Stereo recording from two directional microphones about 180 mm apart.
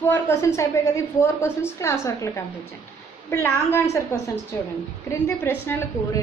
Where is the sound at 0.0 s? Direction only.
15° left (ahead or behind).